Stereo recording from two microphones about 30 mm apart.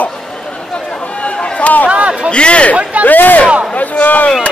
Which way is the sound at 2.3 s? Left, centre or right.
Left.